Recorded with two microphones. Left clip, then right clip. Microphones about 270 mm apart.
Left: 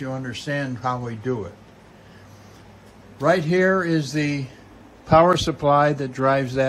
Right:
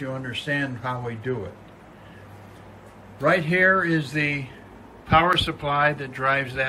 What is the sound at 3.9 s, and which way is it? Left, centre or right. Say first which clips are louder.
Speech: even; left.